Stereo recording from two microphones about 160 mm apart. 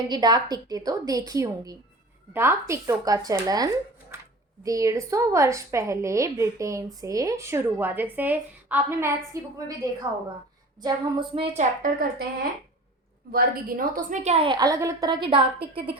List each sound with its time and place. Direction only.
0.1 s a woman's voice: 25° right (ahead or behind)
11.5 s a woman's voice: 60° right (ahead or behind); by 15.4 s 30° right (ahead or behind)